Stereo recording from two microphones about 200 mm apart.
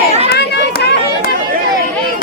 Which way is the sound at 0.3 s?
55° left (ahead or behind).